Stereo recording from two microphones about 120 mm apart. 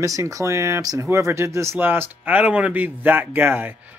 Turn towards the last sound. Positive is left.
turn(degrees=-20)  # may be behind; listen again after turning